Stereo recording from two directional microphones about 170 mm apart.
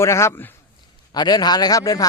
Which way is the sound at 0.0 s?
15° left (ahead or behind).